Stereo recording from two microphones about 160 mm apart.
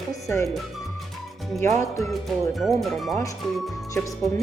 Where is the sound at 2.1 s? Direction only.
Centre (ahead or behind).